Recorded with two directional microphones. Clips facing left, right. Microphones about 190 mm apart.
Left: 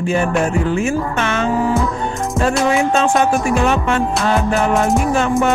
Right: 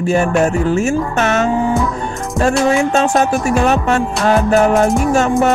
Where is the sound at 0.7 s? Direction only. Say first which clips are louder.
Right 3 dB; 45° right (ahead or behind).